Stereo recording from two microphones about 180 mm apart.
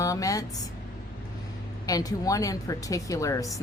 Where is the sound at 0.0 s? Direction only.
20° left (ahead or behind).